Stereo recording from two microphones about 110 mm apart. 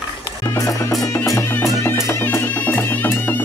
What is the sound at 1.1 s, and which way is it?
Music, 25° left (ahead or behind).